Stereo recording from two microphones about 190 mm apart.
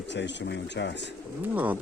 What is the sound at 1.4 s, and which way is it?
Speech, 10° right (ahead or behind).